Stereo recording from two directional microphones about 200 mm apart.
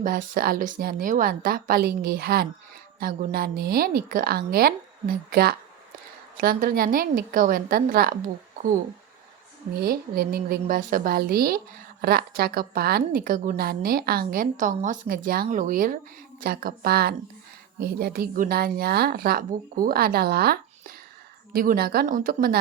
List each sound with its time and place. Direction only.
0.0 s a woman's voice: 45° right (ahead or behind)
9.8 s a woman's voice: 50° right (ahead or behind)